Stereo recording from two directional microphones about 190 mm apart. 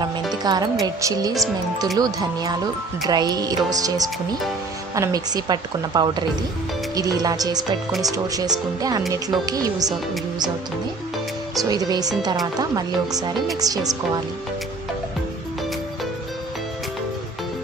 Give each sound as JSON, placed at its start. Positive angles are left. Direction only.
{"t": 0.4, "sound": "speech", "side_deg": -20}
{"t": 11.7, "sound": "speech", "side_deg": -20}